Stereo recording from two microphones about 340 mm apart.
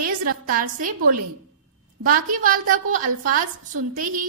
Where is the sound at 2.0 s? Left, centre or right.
Right.